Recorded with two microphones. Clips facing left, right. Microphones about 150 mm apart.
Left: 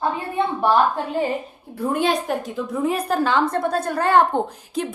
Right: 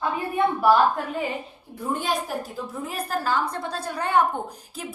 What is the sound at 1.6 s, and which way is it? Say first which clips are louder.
Speech: left 6 dB; 60° left (ahead or behind).